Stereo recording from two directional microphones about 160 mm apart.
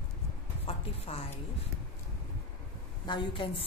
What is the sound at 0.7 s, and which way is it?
Speech, 35° left (ahead or behind).